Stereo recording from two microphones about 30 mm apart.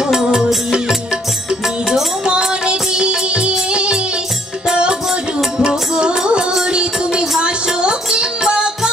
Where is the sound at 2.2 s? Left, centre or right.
Right.